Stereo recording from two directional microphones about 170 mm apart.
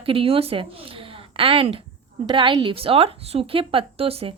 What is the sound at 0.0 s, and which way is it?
A woman's voice, 30° right (ahead or behind).